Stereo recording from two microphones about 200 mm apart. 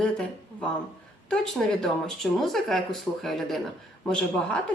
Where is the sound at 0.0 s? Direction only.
5° left (ahead or behind).